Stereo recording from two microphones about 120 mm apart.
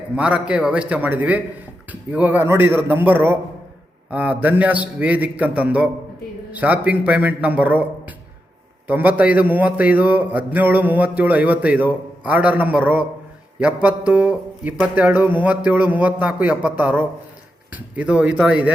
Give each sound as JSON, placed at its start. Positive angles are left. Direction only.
{"t": 0.2, "sound": "a man's voice", "side_deg": -10}